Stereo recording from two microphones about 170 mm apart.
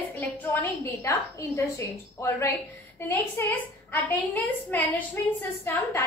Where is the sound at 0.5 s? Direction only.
10° left (ahead or behind).